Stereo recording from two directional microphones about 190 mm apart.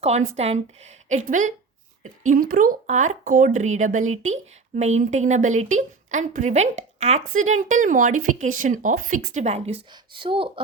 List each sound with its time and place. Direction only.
0.0 s a woman's voice: 35° right (ahead or behind)